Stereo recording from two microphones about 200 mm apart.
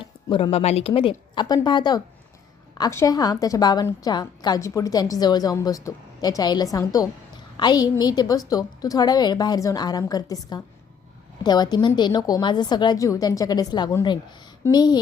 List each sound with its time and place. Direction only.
0.0 s a woman's voice: 25° left (ahead or behind)